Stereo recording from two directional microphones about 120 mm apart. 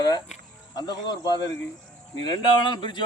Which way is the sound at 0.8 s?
35° left (ahead or behind).